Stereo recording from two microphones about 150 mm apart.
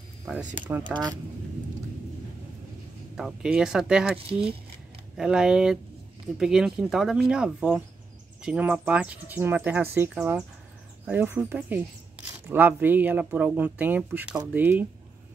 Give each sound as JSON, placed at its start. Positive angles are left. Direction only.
{"t": 0.3, "sound": "speech", "side_deg": -10}
{"t": 0.8, "sound": "speech", "side_deg": -30}
{"t": 3.2, "sound": "speech", "side_deg": -5}